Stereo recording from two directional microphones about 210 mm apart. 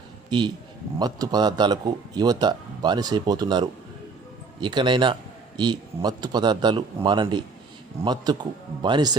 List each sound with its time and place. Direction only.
0.3 s speech: 20° right (ahead or behind)